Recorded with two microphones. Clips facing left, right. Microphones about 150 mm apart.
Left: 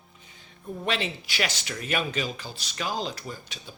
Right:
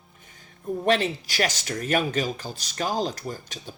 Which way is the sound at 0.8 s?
45° right (ahead or behind).